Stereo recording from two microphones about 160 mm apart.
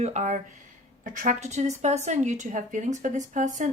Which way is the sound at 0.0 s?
45° right (ahead or behind).